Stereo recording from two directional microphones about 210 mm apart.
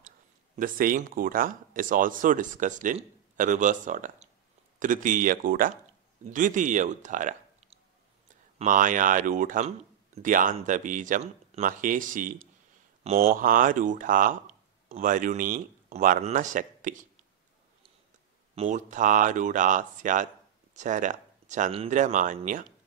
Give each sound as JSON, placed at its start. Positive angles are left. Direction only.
{"t": 0.6, "sound": "a man's voice", "side_deg": -40}
{"t": 18.5, "sound": "speech", "side_deg": -35}